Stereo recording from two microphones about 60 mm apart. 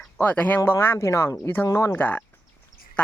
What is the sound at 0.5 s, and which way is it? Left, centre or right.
Speech, left.